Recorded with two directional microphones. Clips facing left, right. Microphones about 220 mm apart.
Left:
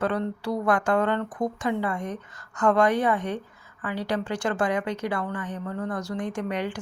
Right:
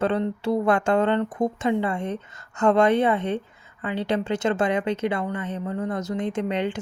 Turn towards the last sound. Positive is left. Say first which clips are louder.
# right 4 dB
turn(degrees=-25)  # may be behind; listen again after turning